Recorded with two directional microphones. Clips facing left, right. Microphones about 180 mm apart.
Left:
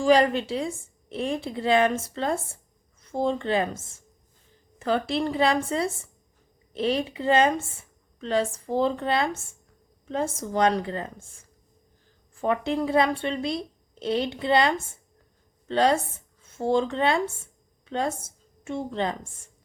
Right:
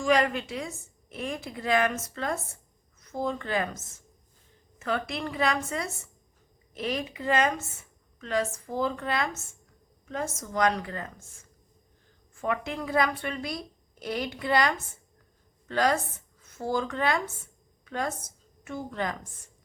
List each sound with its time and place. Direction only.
0.0 s a woman's voice: 30° left (ahead or behind)
12.3 s speech: 30° left (ahead or behind)